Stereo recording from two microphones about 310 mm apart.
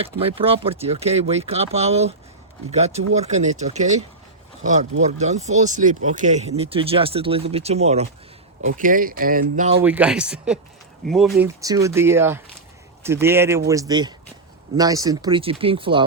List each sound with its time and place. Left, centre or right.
0.0 s speech: centre
9.8 s speech: centre